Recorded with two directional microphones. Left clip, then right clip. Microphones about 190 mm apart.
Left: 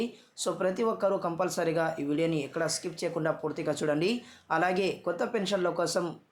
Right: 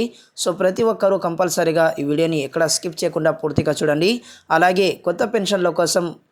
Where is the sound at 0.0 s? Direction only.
30° right (ahead or behind).